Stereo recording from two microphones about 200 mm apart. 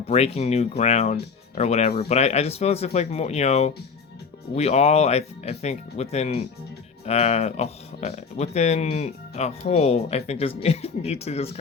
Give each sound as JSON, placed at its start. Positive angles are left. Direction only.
{"t": 0.1, "sound": "speech", "side_deg": 30}